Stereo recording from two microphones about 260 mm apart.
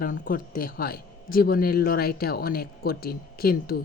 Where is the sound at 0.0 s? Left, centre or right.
Left.